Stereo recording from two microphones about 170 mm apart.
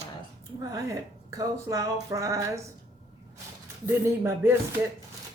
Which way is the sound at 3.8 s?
15° right (ahead or behind).